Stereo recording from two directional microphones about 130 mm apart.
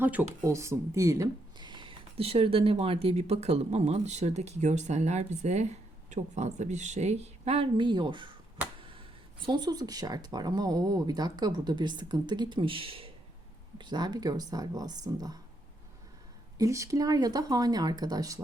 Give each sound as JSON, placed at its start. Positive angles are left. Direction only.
{"t": 0.0, "sound": "speech", "side_deg": -15}
{"t": 16.6, "sound": "speech", "side_deg": -25}